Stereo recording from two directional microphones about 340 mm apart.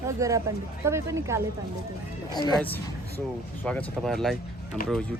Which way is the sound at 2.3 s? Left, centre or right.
Centre.